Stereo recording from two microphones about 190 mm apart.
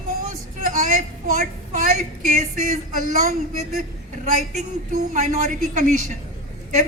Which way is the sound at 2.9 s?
40° right (ahead or behind).